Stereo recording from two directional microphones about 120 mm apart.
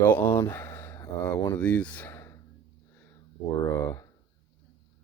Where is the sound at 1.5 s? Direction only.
10° left (ahead or behind).